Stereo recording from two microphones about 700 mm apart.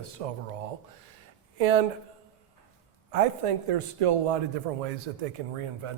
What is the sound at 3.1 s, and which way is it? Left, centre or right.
Speech, right.